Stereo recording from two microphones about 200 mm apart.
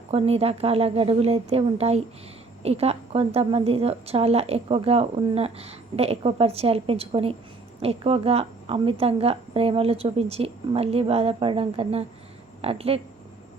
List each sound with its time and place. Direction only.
0.1 s a woman's voice: 30° right (ahead or behind)